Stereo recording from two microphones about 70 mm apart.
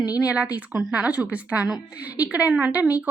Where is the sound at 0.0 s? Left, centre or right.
Left.